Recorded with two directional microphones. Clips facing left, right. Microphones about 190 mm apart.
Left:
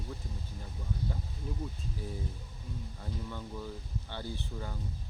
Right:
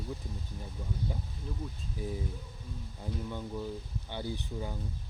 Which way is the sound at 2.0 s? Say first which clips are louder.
Right 5 dB; 15° right (ahead or behind).